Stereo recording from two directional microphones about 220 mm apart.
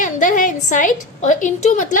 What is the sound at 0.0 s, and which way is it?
A woman's voice, 35° left (ahead or behind).